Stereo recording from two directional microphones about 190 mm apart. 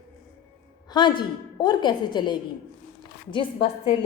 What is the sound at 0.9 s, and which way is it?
A woman's voice, 25° left (ahead or behind).